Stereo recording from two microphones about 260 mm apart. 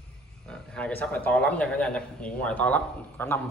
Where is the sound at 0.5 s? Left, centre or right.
Centre.